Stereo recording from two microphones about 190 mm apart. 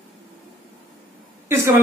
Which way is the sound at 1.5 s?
10° right (ahead or behind).